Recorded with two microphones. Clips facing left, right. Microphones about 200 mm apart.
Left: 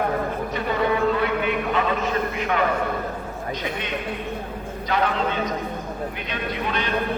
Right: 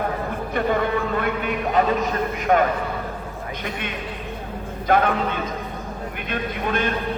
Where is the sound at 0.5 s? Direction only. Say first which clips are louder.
Right 2 dB; 50° right (ahead or behind).